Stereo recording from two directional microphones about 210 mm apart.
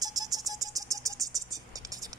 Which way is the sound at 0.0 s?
15° right (ahead or behind).